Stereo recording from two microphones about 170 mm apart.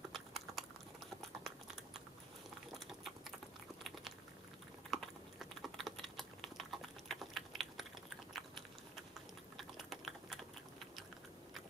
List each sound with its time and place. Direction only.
0.1 s chewing: centre (ahead or behind)
2.7 s a sound: centre (ahead or behind)
4.9 s typing: centre (ahead or behind)
8.3 s biting: centre (ahead or behind)
9.6 s typing: centre (ahead or behind)